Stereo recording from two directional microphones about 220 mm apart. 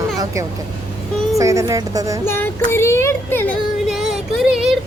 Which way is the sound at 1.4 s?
15° right (ahead or behind).